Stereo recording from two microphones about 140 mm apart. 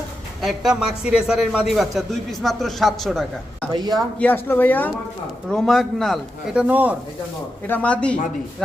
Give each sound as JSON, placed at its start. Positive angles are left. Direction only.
{"t": 0.4, "sound": "a man's voice", "side_deg": -5}
{"t": 3.7, "sound": "speech", "side_deg": -30}
{"t": 4.2, "sound": "speech", "side_deg": 15}
{"t": 5.5, "sound": "a man's voice", "side_deg": 0}
{"t": 7.7, "sound": "speech", "side_deg": 10}